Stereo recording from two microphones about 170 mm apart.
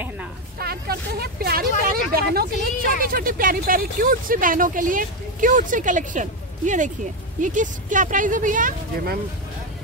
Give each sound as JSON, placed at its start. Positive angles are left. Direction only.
{"t": 0.6, "sound": "speech", "side_deg": -65}